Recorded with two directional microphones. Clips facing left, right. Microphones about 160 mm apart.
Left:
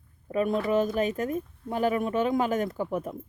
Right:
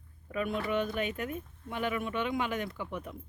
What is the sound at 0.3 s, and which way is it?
Speech, 40° left (ahead or behind).